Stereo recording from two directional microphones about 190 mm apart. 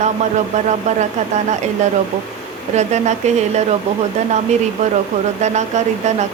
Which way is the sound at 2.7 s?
35° right (ahead or behind).